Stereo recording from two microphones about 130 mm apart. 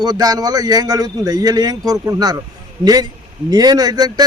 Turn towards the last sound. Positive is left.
turn(degrees=-30)  # may be behind; listen again after turning